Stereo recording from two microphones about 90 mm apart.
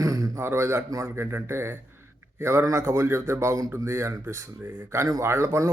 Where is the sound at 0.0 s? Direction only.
40° right (ahead or behind).